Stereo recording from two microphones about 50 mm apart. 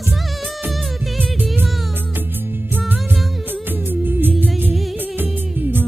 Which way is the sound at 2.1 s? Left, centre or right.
Right.